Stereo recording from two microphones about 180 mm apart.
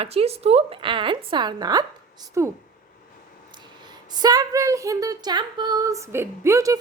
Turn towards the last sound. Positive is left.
turn(degrees=-15)  # may be behind; listen again after turning